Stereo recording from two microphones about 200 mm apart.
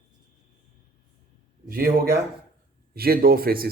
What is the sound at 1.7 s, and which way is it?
Speech, 50° right (ahead or behind).